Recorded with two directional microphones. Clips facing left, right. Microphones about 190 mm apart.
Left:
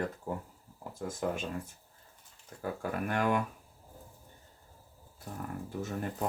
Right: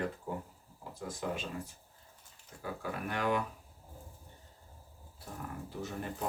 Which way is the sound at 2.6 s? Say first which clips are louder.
Left 4 dB; 50° left (ahead or behind).